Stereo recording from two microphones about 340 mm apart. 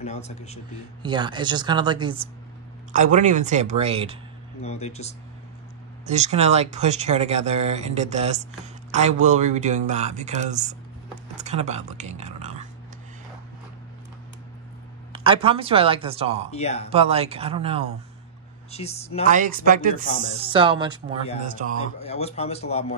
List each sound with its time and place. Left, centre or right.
0.0 s a man's voice: centre
1.0 s speech: centre
4.6 s a man's voice: centre
6.0 s speech: centre
15.1 s speech: centre
16.5 s a man's voice: centre
16.9 s speech: centre
18.7 s speech: centre
19.2 s speech: right
21.7 s speech: centre